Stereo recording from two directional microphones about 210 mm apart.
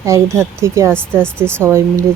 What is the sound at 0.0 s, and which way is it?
Speech, 15° right (ahead or behind).